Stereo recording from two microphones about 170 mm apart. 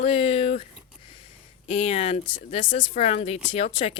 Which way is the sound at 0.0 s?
35° left (ahead or behind).